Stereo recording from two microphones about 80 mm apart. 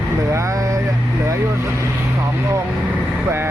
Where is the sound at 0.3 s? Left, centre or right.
Right.